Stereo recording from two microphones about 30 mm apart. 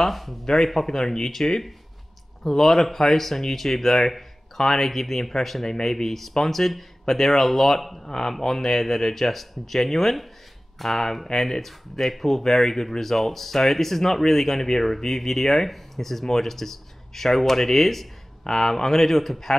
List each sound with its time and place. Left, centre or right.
0.0 s speech: centre
5.7 s speech: left
6.0 s speech: centre
8.0 s speech: centre